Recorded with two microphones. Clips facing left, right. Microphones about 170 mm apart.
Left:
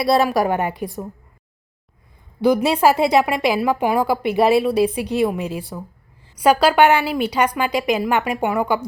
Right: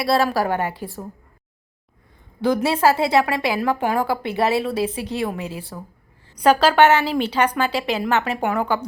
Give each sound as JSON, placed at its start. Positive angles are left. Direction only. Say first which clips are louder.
{"t": 0.0, "sound": "a woman's voice", "louder": "left 3 dB", "side_deg": 20}
{"t": 2.4, "sound": "a woman's voice", "louder": "left 3 dB", "side_deg": 15}